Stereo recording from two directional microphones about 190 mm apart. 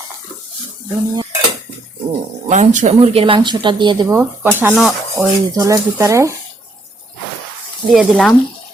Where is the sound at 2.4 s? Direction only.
40° right (ahead or behind); by 4.7 s 10° right (ahead or behind).